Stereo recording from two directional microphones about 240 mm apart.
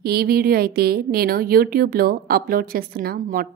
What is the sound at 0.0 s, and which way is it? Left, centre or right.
A woman's voice, right.